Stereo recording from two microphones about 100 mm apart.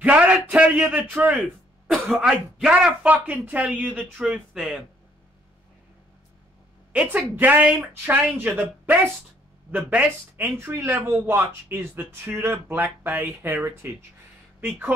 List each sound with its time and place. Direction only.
0.0 s a man's voice: 15° right (ahead or behind)
1.9 s speech: centre (ahead or behind)
4.0 s speech: 5° right (ahead or behind)
6.9 s speech: 15° right (ahead or behind)